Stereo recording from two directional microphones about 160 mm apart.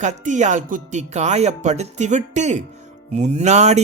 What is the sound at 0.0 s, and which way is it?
A man's voice, 50° right (ahead or behind).